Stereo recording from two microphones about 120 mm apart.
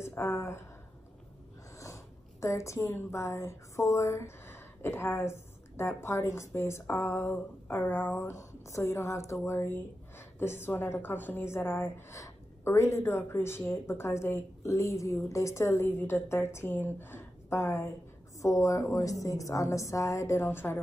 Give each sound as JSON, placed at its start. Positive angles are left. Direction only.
{"t": 0.0, "sound": "a woman's voice", "side_deg": 20}
{"t": 2.4, "sound": "a woman's voice", "side_deg": 25}